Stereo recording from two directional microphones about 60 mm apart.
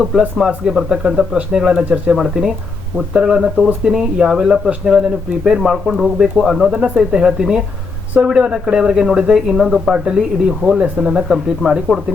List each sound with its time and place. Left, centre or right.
0.3 s speech: centre
6.7 s speech: centre